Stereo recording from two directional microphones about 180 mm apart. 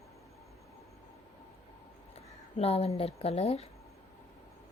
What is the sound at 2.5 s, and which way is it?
A woman's voice, 35° left (ahead or behind).